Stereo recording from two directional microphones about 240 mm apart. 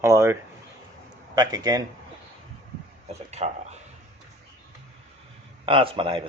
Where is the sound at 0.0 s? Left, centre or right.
Centre.